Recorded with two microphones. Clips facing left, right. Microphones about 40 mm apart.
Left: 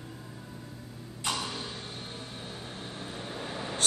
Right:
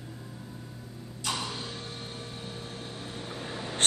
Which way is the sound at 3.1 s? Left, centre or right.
Centre.